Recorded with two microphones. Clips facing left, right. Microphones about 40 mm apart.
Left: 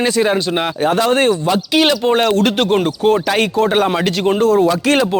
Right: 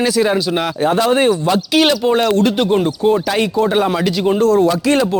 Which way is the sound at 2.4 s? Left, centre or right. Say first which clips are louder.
Even; left.